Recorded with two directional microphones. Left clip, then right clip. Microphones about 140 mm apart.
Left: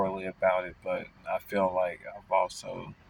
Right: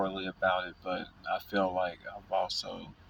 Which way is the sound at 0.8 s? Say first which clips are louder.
Left 2 dB; 25° left (ahead or behind).